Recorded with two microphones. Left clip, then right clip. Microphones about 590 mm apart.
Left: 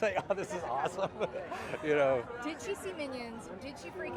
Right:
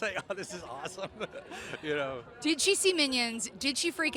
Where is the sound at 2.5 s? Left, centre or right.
Right.